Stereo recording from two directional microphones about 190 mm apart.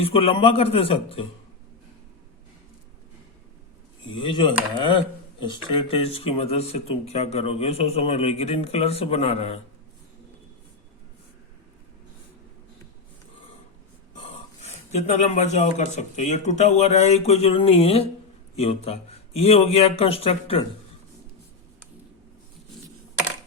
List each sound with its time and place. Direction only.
0.0 s speech: 30° left (ahead or behind)
4.2 s speech: 25° left (ahead or behind)
14.6 s speech: 35° left (ahead or behind)